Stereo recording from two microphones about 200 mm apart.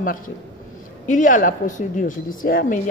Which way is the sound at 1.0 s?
40° left (ahead or behind).